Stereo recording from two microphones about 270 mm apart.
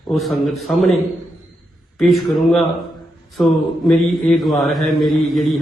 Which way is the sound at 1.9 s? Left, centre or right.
Centre.